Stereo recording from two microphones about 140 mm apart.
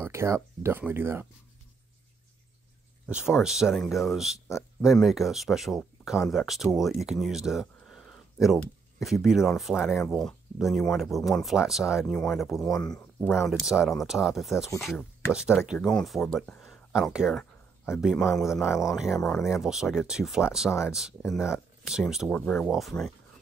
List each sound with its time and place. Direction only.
0.0 s speech: 20° right (ahead or behind)
3.1 s speech: 5° right (ahead or behind)
22.3 s speech: 10° left (ahead or behind)